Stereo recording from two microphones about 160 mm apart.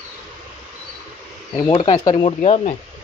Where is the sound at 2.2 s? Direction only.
40° left (ahead or behind).